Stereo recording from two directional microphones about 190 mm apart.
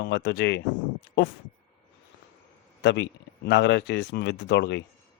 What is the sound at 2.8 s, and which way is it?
Speech, 65° left (ahead or behind).